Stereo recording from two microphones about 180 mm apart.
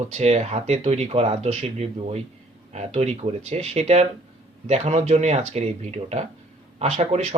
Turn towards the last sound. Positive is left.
turn(degrees=-35)  # may be behind; listen again after turning